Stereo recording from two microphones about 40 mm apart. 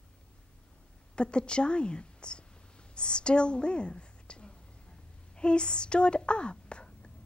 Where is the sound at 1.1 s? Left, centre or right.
Left.